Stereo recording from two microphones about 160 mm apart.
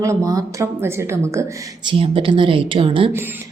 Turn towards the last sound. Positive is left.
turn(degrees=-35)  # may be behind; listen again after turning